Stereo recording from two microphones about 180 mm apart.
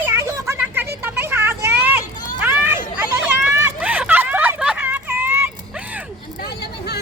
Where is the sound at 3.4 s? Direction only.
10° right (ahead or behind).